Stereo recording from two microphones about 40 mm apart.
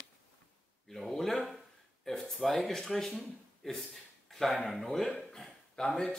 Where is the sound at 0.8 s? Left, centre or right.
Centre.